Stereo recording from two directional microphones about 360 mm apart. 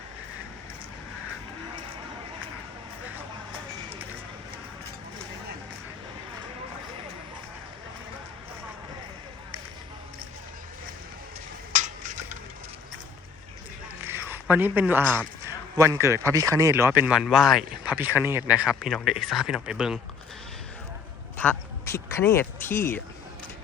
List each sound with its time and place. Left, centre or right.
11.7 s stir: right
14.0 s speech: centre
21.3 s quack: centre